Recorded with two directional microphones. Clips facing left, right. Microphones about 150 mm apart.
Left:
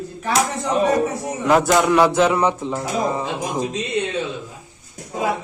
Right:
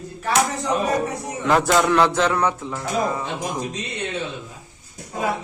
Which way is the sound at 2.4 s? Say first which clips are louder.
Left 3 dB; 20° left (ahead or behind).